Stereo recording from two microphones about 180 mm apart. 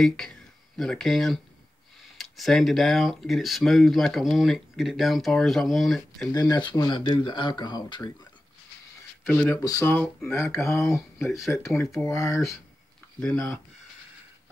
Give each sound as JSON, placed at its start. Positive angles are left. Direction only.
{"t": 0.0, "sound": "speech", "side_deg": 0}
{"t": 6.3, "sound": "speech", "side_deg": 20}
{"t": 9.2, "sound": "speech", "side_deg": 10}
{"t": 10.9, "sound": "speech", "side_deg": 0}
{"t": 11.5, "sound": "speech", "side_deg": 15}
{"t": 13.2, "sound": "speech", "side_deg": 5}